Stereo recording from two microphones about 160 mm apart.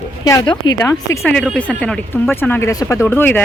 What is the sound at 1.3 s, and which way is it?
Speech, 5° left (ahead or behind).